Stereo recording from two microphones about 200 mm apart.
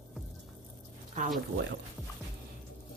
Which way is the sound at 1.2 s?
35° right (ahead or behind).